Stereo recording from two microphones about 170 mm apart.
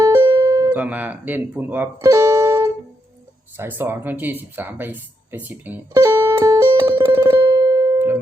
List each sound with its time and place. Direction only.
0.0 s music: 20° right (ahead or behind)
0.7 s speech: 10° right (ahead or behind)
7.4 s music: 30° right (ahead or behind)
7.9 s music: 15° right (ahead or behind)